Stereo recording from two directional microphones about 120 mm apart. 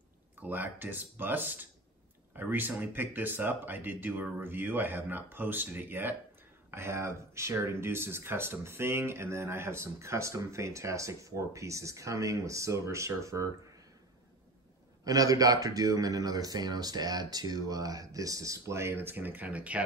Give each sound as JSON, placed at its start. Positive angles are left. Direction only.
{"t": 0.4, "sound": "speech", "side_deg": -15}
{"t": 15.0, "sound": "speech", "side_deg": -30}